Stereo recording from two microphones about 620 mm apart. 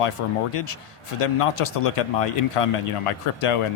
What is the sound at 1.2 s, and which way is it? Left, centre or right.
Speech, left.